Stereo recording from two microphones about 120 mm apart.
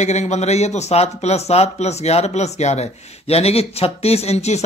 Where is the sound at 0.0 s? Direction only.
70° left (ahead or behind).